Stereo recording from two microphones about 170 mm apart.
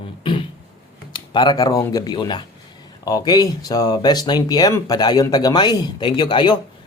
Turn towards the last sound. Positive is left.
turn(degrees=25)  # may be behind; listen again after turning